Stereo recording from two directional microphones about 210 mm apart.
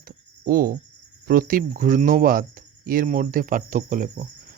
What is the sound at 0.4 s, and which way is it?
Speech, 45° right (ahead or behind).